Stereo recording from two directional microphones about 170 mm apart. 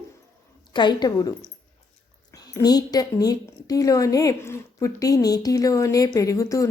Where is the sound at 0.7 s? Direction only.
25° left (ahead or behind).